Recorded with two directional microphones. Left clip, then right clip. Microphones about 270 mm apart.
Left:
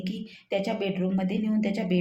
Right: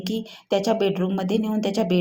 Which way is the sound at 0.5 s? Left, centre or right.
Centre.